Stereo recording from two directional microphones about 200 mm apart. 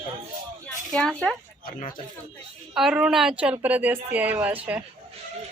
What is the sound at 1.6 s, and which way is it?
Speech, 40° left (ahead or behind).